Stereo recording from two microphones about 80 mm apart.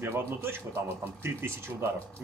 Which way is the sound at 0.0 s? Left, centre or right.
Right.